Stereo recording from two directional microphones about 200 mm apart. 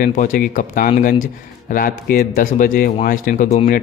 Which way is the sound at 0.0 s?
40° left (ahead or behind).